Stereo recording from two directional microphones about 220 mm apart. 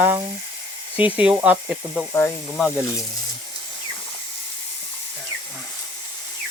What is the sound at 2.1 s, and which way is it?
Speech, 10° left (ahead or behind).